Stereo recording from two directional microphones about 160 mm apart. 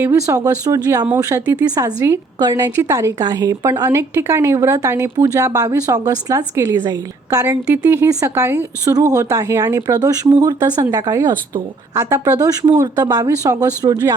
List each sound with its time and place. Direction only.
0.0 s a woman's voice: 15° right (ahead or behind)